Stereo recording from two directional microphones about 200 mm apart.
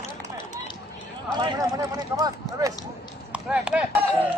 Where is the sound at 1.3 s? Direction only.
20° right (ahead or behind).